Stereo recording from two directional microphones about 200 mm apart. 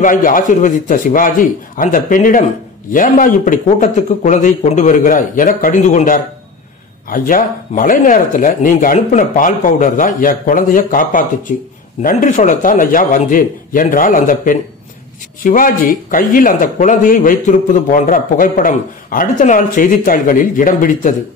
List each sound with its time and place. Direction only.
0.0 s speech: 45° left (ahead or behind)